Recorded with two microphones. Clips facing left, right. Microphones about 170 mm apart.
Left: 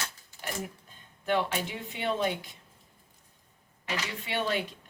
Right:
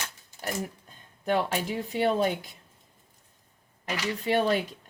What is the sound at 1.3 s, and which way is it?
Speech, 40° right (ahead or behind).